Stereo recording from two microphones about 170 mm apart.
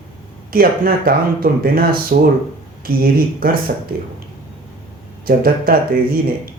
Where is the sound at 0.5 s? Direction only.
60° right (ahead or behind).